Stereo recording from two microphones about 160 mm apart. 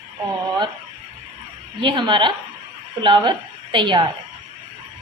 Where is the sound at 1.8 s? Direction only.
30° right (ahead or behind).